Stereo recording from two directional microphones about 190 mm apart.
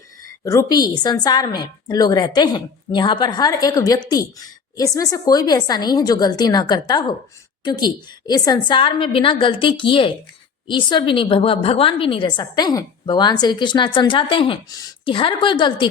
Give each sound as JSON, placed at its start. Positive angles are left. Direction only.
{"t": 0.4, "sound": "a woman's voice", "side_deg": 20}